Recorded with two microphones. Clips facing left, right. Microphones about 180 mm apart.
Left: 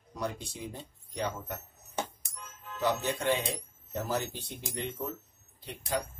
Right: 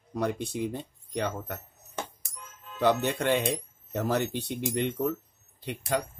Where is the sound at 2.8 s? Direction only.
65° right (ahead or behind).